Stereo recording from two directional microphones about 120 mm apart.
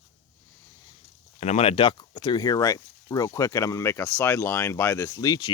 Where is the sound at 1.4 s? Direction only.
60° left (ahead or behind).